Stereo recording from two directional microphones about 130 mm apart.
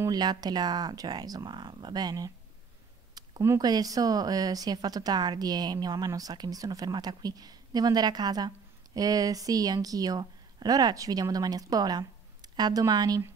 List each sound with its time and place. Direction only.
0.0 s speech: 30° right (ahead or behind)